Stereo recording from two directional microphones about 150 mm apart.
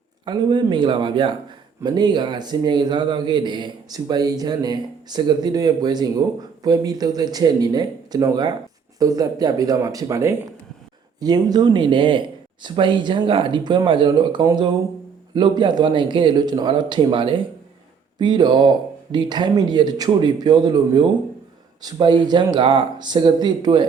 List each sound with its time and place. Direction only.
0.3 s a man's voice: 30° right (ahead or behind)